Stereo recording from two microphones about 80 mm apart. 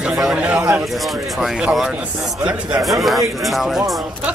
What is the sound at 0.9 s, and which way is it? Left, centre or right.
Speech, centre.